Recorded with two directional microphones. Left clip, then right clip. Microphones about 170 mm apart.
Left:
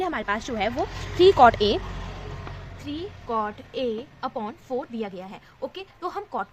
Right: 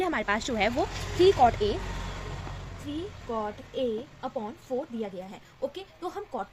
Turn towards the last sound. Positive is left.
turn(degrees=30)  # may be behind; listen again after turning